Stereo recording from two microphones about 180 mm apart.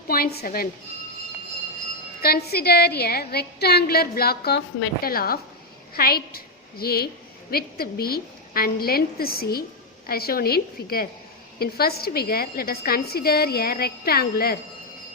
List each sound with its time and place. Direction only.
0.1 s a woman's voice: 60° left (ahead or behind)
2.2 s a woman's voice: 60° left (ahead or behind)